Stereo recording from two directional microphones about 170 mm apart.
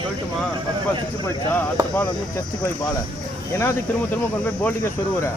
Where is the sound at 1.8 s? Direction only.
20° right (ahead or behind).